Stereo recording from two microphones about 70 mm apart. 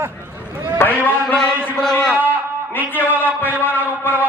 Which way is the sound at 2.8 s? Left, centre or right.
Right.